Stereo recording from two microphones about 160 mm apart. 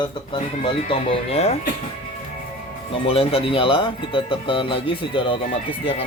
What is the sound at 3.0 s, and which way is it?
Speech, 35° left (ahead or behind).